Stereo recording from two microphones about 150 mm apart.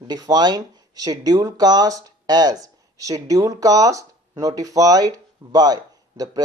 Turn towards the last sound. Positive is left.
turn(degrees=-25)  # may be behind; listen again after turning